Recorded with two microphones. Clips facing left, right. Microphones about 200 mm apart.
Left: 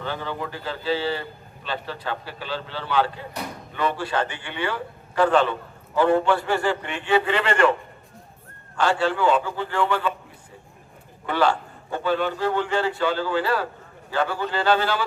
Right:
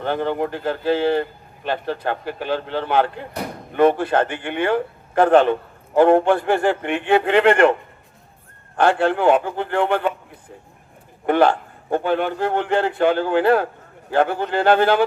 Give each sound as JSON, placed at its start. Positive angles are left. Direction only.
{"t": 0.0, "sound": "a man's voice", "side_deg": -55}
{"t": 11.3, "sound": "a man's voice", "side_deg": -55}